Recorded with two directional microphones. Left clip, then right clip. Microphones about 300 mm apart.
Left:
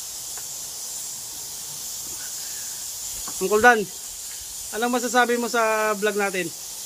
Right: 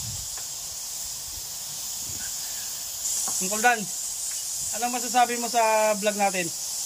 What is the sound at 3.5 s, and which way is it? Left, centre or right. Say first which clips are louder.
Speech: left 7 dB; centre.